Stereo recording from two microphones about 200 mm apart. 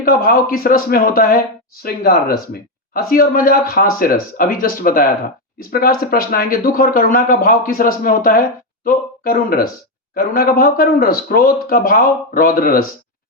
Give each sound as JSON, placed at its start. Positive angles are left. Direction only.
{"t": 0.0, "sound": "speech", "side_deg": 45}